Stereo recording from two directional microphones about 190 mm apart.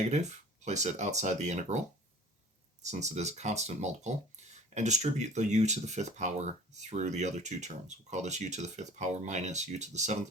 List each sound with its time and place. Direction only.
0.1 s speech: 35° right (ahead or behind)
2.8 s speech: 40° right (ahead or behind)
4.4 s a sound: 35° right (ahead or behind)
4.7 s speech: 40° right (ahead or behind)